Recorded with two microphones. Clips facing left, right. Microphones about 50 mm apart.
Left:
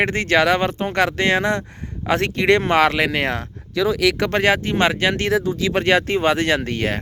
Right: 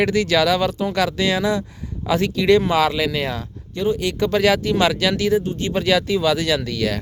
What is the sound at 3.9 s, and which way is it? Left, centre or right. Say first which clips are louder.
Speech: left 3 dB; left.